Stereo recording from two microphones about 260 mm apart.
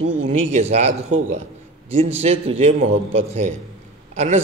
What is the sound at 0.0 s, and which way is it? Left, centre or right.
Speech, right.